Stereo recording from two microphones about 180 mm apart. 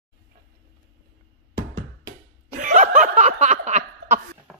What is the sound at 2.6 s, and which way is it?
Snicker, 40° right (ahead or behind).